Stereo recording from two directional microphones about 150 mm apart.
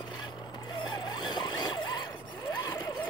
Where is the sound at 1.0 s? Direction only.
30° left (ahead or behind).